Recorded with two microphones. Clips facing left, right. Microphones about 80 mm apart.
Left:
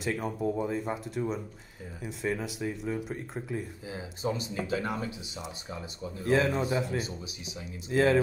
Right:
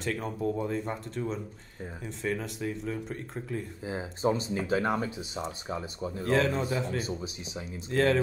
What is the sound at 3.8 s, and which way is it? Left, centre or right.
Speech, right.